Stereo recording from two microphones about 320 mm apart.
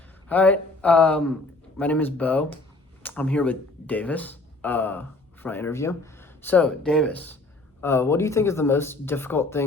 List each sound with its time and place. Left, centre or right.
0.3 s speech: centre